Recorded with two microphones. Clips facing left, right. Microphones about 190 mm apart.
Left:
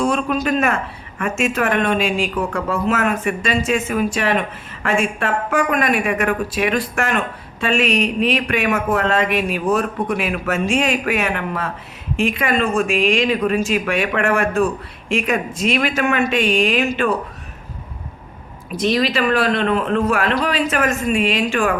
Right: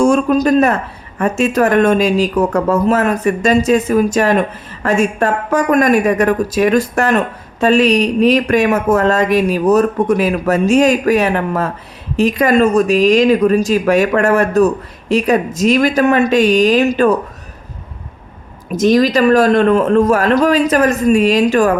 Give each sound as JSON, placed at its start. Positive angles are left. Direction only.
{"t": 0.0, "sound": "a sound", "side_deg": -45}
{"t": 1.2, "sound": "speech", "side_deg": -35}
{"t": 18.7, "sound": "a man's voice", "side_deg": -45}